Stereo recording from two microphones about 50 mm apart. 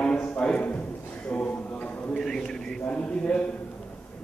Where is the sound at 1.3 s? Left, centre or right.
Left.